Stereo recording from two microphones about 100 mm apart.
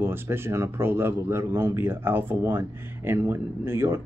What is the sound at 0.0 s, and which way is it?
A man's voice, 20° right (ahead or behind).